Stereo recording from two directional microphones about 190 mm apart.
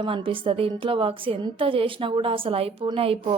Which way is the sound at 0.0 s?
25° right (ahead or behind).